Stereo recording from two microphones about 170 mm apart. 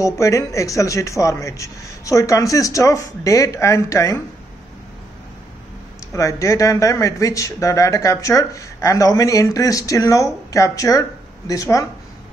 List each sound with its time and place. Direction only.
0.0 s speech: 20° left (ahead or behind)
6.1 s speech: 20° left (ahead or behind)